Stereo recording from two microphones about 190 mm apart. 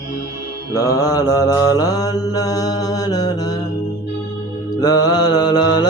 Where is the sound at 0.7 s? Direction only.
15° left (ahead or behind).